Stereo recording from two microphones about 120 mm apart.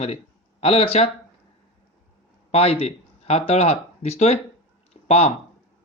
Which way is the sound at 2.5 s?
55° left (ahead or behind).